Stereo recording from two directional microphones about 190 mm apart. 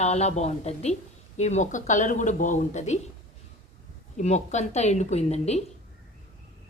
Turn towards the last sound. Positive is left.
turn(degrees=35)  # may be behind; listen again after turning